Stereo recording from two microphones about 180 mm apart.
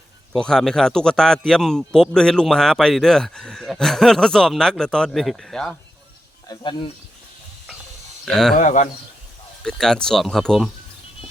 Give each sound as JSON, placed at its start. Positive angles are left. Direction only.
{"t": 0.3, "sound": "a man's voice", "side_deg": 5}
{"t": 6.5, "sound": "speech", "side_deg": 25}
{"t": 8.2, "sound": "a man's voice", "side_deg": 0}
{"t": 8.5, "sound": "a man's voice", "side_deg": 45}
{"t": 9.6, "sound": "a man's voice", "side_deg": 0}